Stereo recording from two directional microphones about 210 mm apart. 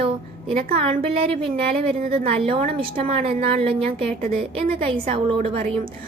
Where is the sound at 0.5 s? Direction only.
25° right (ahead or behind).